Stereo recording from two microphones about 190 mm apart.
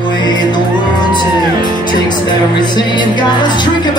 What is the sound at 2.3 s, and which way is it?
Music, 25° left (ahead or behind).